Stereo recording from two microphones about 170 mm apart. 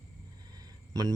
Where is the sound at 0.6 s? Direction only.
20° right (ahead or behind).